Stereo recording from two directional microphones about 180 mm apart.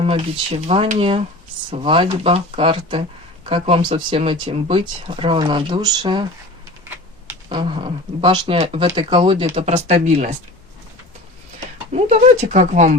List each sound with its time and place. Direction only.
0.0 s speech: 30° right (ahead or behind)
7.5 s speech: 30° right (ahead or behind)
11.9 s speech: 40° right (ahead or behind)